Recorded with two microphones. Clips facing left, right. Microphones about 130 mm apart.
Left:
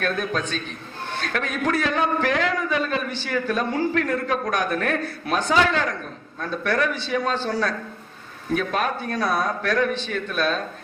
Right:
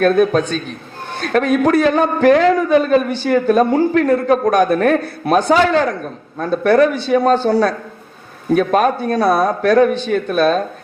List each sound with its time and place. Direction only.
0.0 s a man's voice: 40° right (ahead or behind)
3.9 s a man's voice: 35° right (ahead or behind)